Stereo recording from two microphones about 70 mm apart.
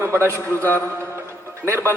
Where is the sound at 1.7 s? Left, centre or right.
Right.